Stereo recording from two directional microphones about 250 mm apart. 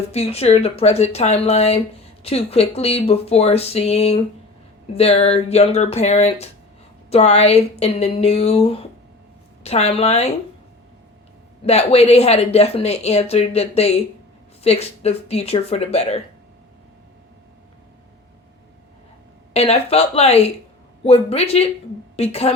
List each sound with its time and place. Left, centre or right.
0.1 s speech: left
11.6 s speech: left
19.5 s a woman's voice: left